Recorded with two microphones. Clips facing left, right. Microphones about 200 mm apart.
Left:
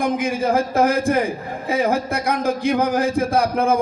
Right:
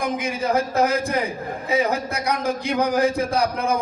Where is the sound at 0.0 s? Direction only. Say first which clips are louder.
Left 4 dB; 55° left (ahead or behind).